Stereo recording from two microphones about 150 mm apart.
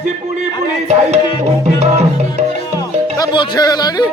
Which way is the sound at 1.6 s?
50° right (ahead or behind).